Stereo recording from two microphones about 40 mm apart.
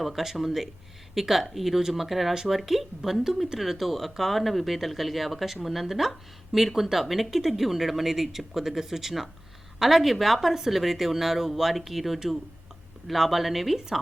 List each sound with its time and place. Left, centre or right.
0.0 s speech: centre